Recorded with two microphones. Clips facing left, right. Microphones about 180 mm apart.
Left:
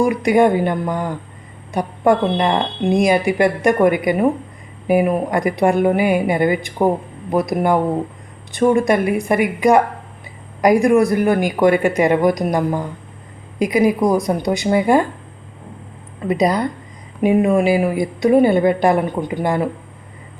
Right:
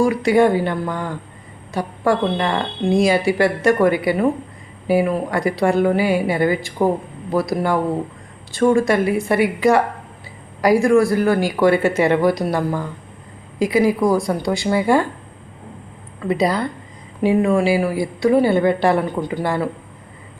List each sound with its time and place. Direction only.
0.0 s a woman's voice: 20° left (ahead or behind)
16.2 s a woman's voice: 20° left (ahead or behind)